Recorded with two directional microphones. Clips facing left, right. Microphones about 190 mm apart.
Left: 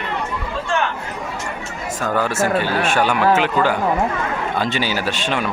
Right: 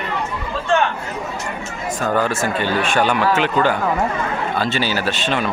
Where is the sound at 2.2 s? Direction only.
10° left (ahead or behind).